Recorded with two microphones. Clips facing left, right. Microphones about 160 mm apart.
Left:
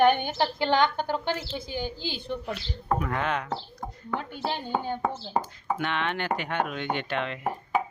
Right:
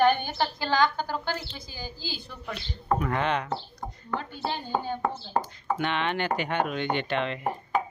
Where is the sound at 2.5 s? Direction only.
Centre (ahead or behind).